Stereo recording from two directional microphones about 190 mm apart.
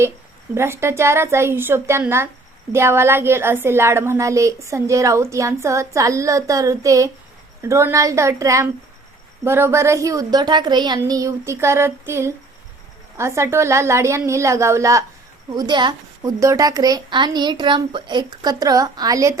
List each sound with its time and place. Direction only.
0.5 s a woman's voice: 15° right (ahead or behind)